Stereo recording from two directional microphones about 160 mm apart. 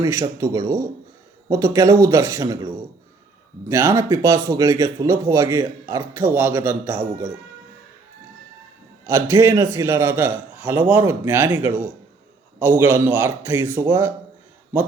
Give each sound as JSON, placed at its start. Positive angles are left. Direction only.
{"t": 0.0, "sound": "a man's voice", "side_deg": -20}
{"t": 9.0, "sound": "a man's voice", "side_deg": -20}